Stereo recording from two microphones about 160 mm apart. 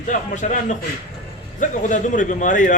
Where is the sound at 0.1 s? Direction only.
50° left (ahead or behind).